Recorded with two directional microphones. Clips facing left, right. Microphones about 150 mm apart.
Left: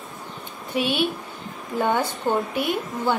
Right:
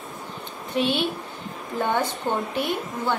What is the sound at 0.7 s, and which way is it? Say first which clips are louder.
Speech: right 1 dB; 5° left (ahead or behind).